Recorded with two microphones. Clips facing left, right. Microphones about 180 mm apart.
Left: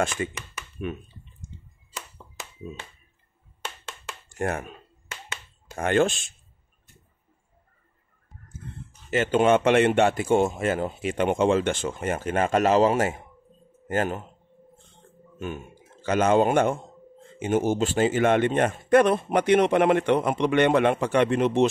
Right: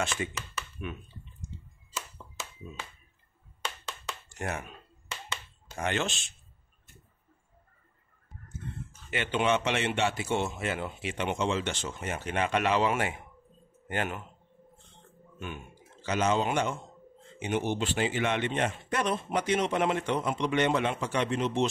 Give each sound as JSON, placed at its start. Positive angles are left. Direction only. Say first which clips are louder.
{"t": 4.3, "sound": "speech", "louder": "left 8 dB", "side_deg": 50}
{"t": 5.8, "sound": "speech", "louder": "left 9 dB", "side_deg": 50}
{"t": 9.1, "sound": "a man's voice", "louder": "left 8 dB", "side_deg": 45}
{"t": 15.3, "sound": "a man's voice", "louder": "left 7 dB", "side_deg": 40}